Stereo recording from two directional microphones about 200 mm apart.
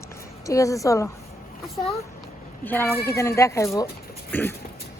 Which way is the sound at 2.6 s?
10° left (ahead or behind).